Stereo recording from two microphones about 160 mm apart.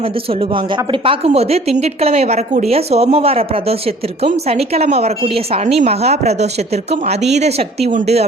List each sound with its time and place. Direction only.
0.3 s a woman's voice: 35° right (ahead or behind)